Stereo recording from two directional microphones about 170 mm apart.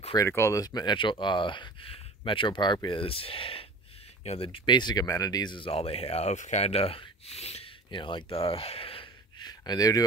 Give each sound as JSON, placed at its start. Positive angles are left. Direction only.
{"t": 0.3, "sound": "speech", "side_deg": 15}